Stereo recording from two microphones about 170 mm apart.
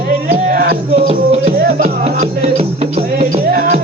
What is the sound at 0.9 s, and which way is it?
Music, 40° right (ahead or behind).